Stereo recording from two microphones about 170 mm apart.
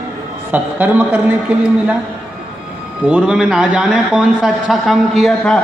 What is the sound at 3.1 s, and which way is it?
A man's voice, 5° right (ahead or behind).